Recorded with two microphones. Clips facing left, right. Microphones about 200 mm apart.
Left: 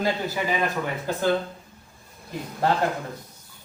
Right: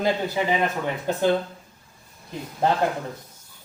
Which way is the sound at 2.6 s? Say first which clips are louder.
Right 1 dB; 20° right (ahead or behind).